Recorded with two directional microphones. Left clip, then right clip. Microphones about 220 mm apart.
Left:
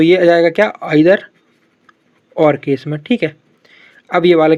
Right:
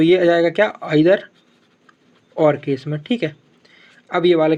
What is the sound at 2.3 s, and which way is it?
Speech, 25° left (ahead or behind).